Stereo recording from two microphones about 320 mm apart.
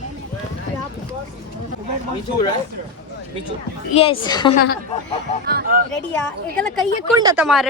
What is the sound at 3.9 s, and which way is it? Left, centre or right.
Speech, centre.